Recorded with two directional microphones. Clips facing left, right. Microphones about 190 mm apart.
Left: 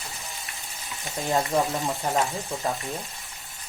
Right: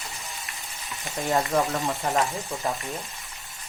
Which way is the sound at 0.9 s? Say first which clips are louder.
Right 1 dB; centre (ahead or behind).